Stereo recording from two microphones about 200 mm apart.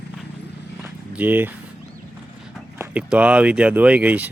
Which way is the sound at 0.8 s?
10° right (ahead or behind).